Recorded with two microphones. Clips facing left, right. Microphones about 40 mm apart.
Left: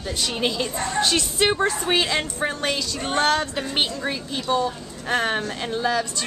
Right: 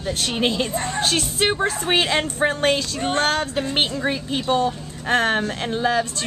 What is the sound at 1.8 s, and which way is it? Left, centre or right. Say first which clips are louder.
Speech: right 2 dB; right.